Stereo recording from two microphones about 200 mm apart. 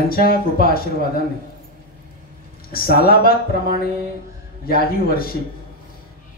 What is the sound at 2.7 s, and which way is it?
Speech, 50° left (ahead or behind).